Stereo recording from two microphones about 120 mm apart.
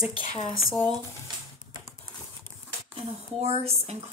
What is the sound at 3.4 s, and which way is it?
Speech, 60° right (ahead or behind).